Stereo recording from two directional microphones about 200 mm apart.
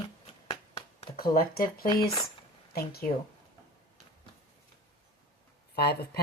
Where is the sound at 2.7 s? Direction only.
50° left (ahead or behind).